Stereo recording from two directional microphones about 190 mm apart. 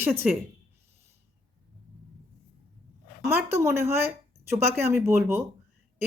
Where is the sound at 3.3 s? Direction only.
10° right (ahead or behind).